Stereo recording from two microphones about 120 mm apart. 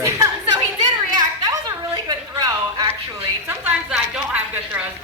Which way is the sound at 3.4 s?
15° right (ahead or behind).